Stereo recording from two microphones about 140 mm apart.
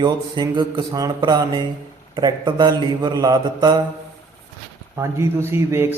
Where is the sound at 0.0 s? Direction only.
30° right (ahead or behind).